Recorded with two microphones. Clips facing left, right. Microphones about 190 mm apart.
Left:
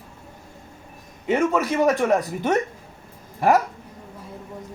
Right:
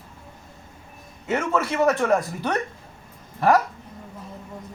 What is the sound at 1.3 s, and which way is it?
A man's voice, 15° left (ahead or behind).